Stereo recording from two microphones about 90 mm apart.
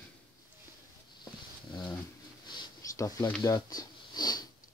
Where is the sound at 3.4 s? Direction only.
45° left (ahead or behind).